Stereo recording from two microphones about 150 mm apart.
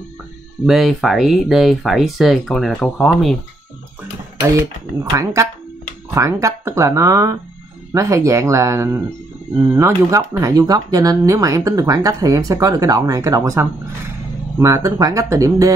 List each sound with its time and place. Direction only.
0.7 s speech: centre (ahead or behind)
5.1 s speech: 20° right (ahead or behind)